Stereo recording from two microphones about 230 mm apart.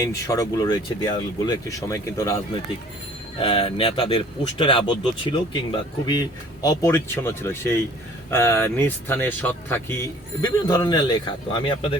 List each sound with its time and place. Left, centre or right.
0.0 s speech: centre